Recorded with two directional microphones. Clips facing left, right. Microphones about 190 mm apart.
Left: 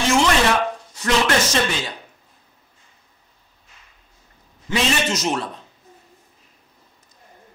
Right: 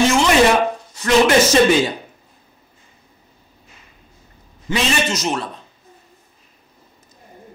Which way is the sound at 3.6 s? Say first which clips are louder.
Right 4 dB; 10° right (ahead or behind).